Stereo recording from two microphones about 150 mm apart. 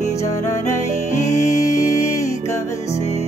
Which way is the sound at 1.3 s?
50° left (ahead or behind).